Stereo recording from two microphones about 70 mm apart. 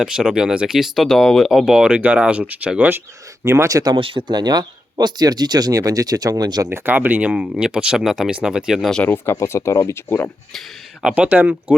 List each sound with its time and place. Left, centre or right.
0.0 s speech: centre
3.4 s speech: right
4.3 s speech: right
6.7 s speech: right; by 8.9 s centre
9.0 s speech: left
9.3 s speech: left
10.1 s speech: left
11.1 s speech: right